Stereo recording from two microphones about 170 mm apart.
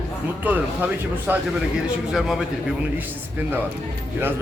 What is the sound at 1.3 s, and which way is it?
A man's voice, 10° right (ahead or behind).